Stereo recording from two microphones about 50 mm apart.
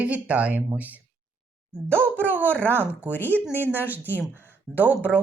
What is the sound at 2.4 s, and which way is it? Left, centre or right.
Speech, left.